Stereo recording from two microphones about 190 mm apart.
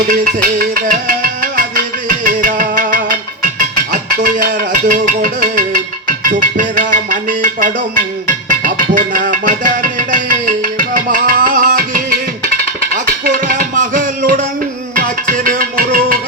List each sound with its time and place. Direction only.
0.1 s music: 45° right (ahead or behind)
12.9 s a sound: 45° right (ahead or behind)
14.9 s music: 45° right (ahead or behind)